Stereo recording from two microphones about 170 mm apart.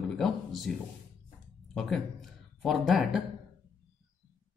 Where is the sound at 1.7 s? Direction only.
Centre (ahead or behind).